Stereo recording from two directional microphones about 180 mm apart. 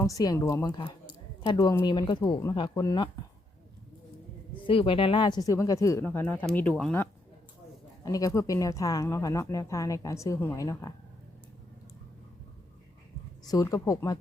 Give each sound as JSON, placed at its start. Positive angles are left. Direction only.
{"t": 0.0, "sound": "speech", "side_deg": 20}
{"t": 4.6, "sound": "speech", "side_deg": 30}
{"t": 8.0, "sound": "speech", "side_deg": 20}
{"t": 13.5, "sound": "speech", "side_deg": 20}